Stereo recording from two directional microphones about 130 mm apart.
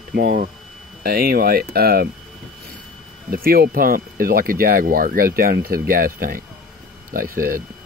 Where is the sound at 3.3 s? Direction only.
90° right.